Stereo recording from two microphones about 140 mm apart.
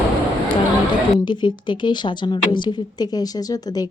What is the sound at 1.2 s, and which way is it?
A woman's voice, 35° left (ahead or behind).